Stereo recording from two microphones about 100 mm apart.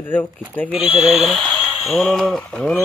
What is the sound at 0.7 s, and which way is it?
Speech, 10° right (ahead or behind).